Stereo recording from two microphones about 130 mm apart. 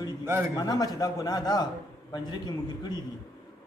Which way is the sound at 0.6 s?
30° left (ahead or behind).